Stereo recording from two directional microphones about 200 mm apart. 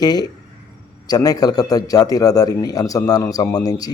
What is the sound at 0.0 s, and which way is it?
A man's voice, 20° left (ahead or behind).